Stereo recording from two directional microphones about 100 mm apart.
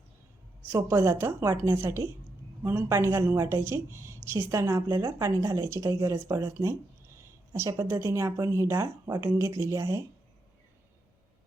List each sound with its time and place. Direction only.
0.9 s a woman's voice: 25° right (ahead or behind)